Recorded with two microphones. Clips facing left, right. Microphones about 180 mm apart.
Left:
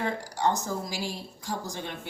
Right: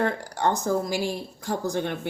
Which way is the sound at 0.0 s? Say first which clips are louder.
Right 3 dB; 55° right (ahead or behind).